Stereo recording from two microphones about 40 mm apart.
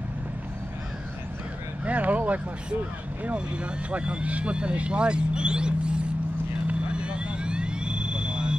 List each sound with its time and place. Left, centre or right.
1.9 s a sound: right
3.9 s speech: right
6.7 s vehicle: right